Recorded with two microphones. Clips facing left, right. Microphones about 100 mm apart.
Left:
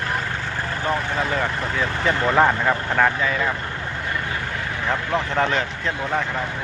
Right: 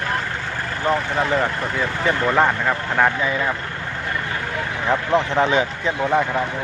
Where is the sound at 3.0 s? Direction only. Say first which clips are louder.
Right 2 dB; 15° right (ahead or behind).